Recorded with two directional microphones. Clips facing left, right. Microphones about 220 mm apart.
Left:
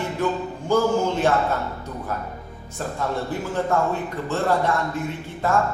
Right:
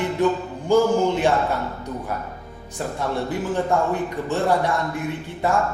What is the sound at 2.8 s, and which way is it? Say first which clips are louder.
A man's voice: right 1 dB; 15° right (ahead or behind).